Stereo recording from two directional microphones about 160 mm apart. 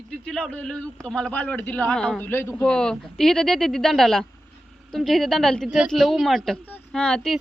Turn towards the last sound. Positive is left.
turn(degrees=5)  # may be behind; listen again after turning